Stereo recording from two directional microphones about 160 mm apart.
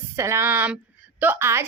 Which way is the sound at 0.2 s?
15° right (ahead or behind).